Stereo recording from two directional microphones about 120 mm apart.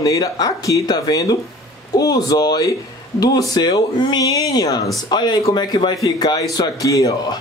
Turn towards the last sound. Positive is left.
turn(degrees=30)  # may be behind; listen again after turning